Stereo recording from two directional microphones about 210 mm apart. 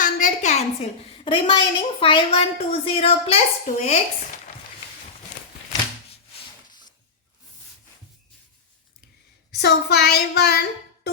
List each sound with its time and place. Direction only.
0.0 s a woman's voice: 35° left (ahead or behind)
9.5 s speech: 50° left (ahead or behind)